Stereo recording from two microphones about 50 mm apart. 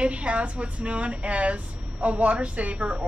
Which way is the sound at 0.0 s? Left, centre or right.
Right.